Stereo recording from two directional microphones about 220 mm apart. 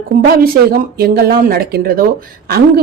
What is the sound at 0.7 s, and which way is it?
A woman's voice, 40° right (ahead or behind).